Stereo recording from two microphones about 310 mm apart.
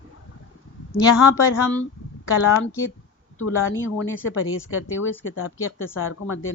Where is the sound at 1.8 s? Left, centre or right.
Left.